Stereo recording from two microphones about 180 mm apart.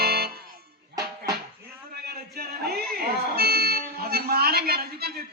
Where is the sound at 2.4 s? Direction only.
60° right (ahead or behind).